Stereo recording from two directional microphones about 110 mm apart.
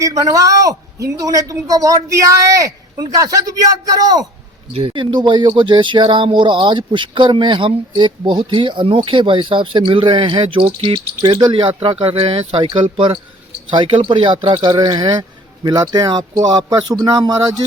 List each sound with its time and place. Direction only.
0.0 s a man's voice: 30° right (ahead or behind)
4.7 s speech: 50° right (ahead or behind)
11.2 s a man's voice: 40° right (ahead or behind)
11.8 s a man's voice: 55° right (ahead or behind); by 17.5 s 35° right (ahead or behind)